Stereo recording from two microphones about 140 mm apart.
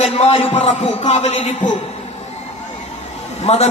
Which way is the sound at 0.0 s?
45° left (ahead or behind).